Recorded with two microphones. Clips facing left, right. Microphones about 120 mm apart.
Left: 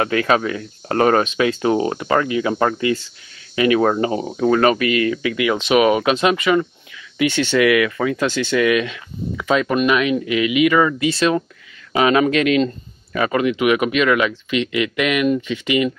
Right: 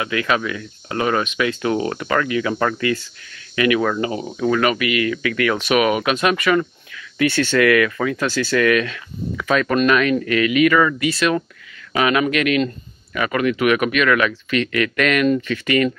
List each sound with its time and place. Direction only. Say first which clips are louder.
0.0 s speech: left 4 dB; 35° left (ahead or behind); by 15.9 s 15° left (ahead or behind)